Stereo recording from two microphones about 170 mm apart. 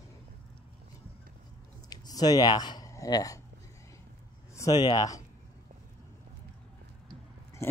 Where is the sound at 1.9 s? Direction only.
25° left (ahead or behind).